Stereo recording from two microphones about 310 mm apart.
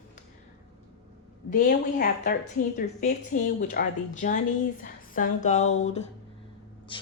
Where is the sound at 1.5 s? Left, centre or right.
Left.